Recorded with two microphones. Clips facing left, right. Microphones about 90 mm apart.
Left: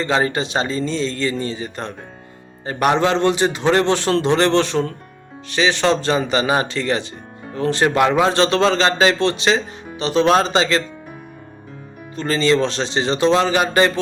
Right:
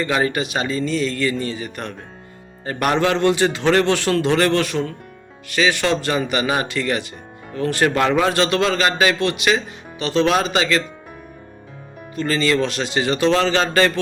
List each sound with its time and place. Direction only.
0.0 s a man's voice: 30° left (ahead or behind)
5.5 s a man's voice: 25° left (ahead or behind)
12.1 s a man's voice: 30° left (ahead or behind)